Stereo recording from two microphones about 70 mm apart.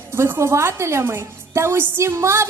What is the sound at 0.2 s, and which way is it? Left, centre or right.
A woman's voice, right.